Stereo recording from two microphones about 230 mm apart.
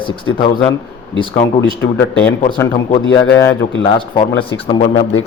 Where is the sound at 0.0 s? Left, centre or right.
Left.